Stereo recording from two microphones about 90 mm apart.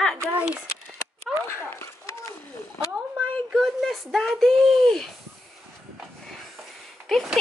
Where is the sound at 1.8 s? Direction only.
30° left (ahead or behind).